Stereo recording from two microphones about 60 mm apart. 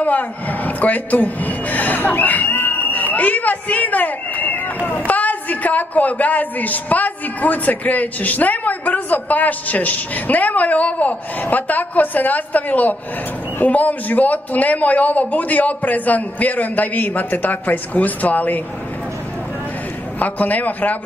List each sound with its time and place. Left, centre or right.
0.0 s a woman's voice: left
20.2 s a woman's voice: left